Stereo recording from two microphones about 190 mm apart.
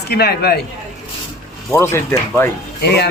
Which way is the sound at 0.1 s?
55° left (ahead or behind).